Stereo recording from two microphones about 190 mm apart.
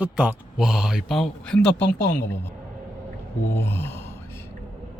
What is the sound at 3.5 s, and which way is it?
Gasp, 10° left (ahead or behind).